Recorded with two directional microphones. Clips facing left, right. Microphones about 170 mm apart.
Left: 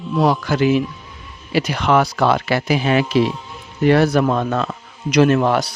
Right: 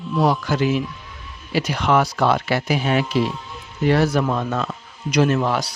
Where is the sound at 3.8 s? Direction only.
65° left (ahead or behind).